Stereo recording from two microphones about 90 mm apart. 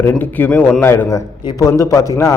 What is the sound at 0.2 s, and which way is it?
A man's voice, 20° left (ahead or behind).